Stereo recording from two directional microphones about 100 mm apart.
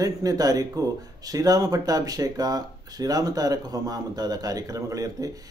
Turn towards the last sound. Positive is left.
turn(degrees=-35)  # may be behind; listen again after turning